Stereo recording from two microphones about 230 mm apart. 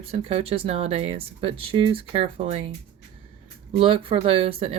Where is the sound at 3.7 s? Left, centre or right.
Right.